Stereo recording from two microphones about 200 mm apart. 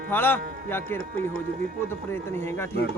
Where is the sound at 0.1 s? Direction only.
10° left (ahead or behind).